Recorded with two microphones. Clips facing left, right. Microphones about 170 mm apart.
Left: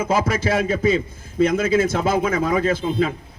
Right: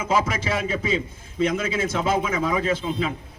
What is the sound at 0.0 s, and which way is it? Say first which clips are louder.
A man's voice: left 3 dB; 40° left (ahead or behind).